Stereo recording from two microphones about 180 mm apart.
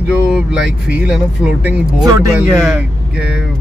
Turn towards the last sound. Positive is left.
turn(degrees=-5)  # may be behind; listen again after turning